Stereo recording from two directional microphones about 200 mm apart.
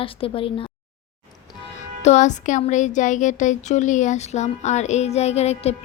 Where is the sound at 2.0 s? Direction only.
35° left (ahead or behind).